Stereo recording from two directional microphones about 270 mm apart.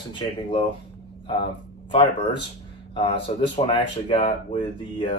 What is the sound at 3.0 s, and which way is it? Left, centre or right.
Speech, centre.